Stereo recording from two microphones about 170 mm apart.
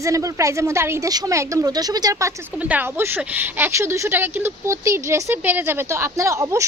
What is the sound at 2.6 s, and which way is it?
Speech, 10° right (ahead or behind).